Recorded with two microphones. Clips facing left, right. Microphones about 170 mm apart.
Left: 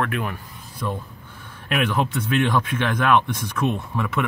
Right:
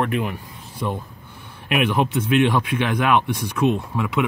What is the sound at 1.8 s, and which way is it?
Speech, 10° right (ahead or behind).